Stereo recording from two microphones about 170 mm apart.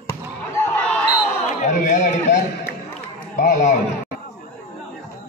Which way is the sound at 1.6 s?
45° left (ahead or behind).